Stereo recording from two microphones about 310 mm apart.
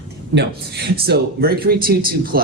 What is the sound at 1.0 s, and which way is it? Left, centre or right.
Speech, right.